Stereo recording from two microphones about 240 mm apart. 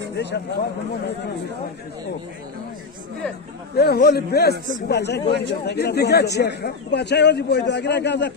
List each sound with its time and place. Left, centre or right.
0.1 s speech: left
3.7 s speech: left